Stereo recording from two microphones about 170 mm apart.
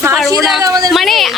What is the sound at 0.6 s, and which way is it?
Speech, 20° right (ahead or behind).